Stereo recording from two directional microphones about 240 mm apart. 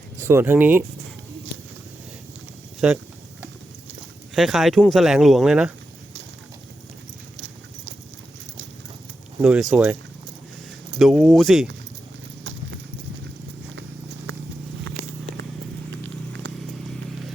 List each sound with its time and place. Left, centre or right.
0.2 s speech: centre
2.8 s speech: centre
4.4 s speech: centre
9.4 s speech: centre
15.9 s a sound: right